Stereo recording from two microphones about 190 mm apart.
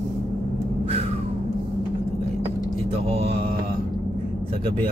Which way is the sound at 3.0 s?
30° right (ahead or behind).